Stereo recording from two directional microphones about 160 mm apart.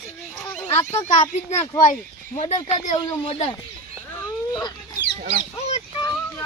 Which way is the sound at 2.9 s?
40° left (ahead or behind).